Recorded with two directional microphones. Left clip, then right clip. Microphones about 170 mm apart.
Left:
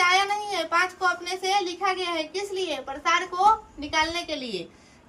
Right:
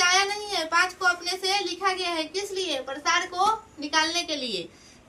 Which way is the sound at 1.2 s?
25° left (ahead or behind).